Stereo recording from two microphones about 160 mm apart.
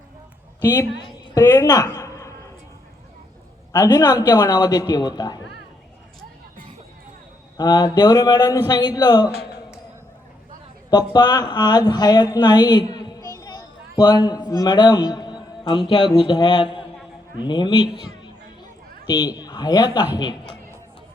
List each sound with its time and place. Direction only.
0.6 s a woman's voice: 20° left (ahead or behind)
3.7 s a man's voice: 20° left (ahead or behind)
7.5 s a man's voice: 25° left (ahead or behind)
11.1 s a man's voice: 25° left (ahead or behind)